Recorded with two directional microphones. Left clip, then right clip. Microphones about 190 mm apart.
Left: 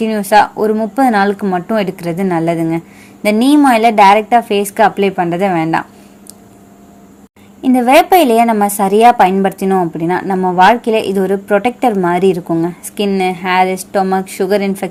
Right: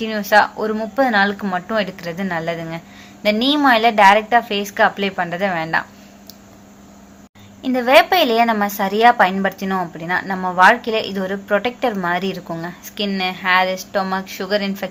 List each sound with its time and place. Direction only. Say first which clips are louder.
0.0 s a woman's voice: left 5 dB; 40° left (ahead or behind)
7.6 s a woman's voice: left 4 dB; 40° left (ahead or behind)